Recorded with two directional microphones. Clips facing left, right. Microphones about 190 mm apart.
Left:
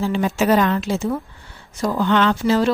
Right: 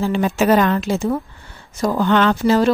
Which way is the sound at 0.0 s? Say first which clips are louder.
Right 2 dB; 50° right (ahead or behind).